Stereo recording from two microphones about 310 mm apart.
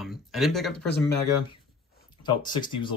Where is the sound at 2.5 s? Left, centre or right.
Centre.